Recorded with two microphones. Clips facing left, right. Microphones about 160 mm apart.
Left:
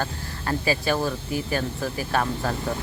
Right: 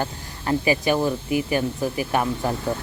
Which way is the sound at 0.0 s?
15° right (ahead or behind).